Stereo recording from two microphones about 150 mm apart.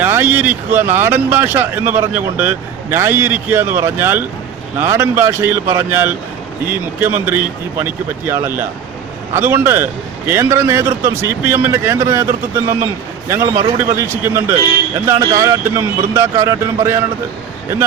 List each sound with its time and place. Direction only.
0.0 s a man's voice: 15° right (ahead or behind)
13.5 s speech: 40° right (ahead or behind)
13.9 s speech: 15° right (ahead or behind)